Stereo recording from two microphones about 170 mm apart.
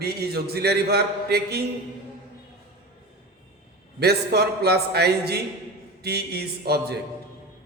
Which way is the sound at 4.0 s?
70° right (ahead or behind).